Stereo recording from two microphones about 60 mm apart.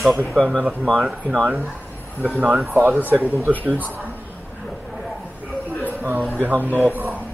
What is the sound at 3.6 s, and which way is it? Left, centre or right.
Speech, right.